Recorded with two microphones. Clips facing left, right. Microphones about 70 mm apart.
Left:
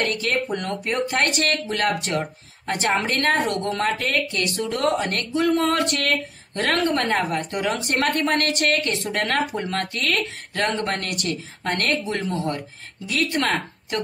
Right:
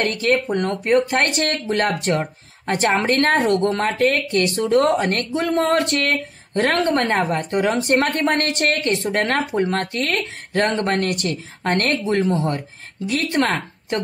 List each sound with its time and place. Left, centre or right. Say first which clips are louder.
0.0 s speech: right 4 dB; right